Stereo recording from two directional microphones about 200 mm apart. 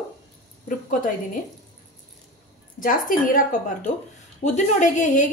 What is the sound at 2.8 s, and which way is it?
A woman's voice, 45° left (ahead or behind).